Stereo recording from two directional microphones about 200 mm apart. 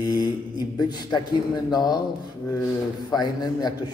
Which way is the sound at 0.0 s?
20° left (ahead or behind).